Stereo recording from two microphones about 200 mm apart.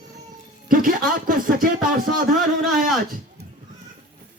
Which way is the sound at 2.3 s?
Centre (ahead or behind).